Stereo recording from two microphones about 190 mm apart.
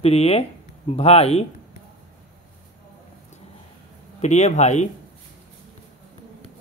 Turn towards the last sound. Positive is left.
turn(degrees=40)  # may be behind; listen again after turning